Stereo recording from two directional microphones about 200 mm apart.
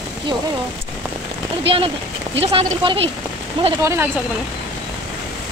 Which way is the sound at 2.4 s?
25° right (ahead or behind).